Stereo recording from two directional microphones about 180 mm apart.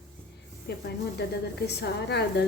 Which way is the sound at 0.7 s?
65° left (ahead or behind).